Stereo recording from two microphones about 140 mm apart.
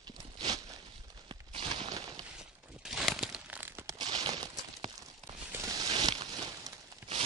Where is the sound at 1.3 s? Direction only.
35° right (ahead or behind).